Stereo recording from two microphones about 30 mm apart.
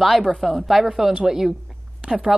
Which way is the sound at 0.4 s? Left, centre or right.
Centre.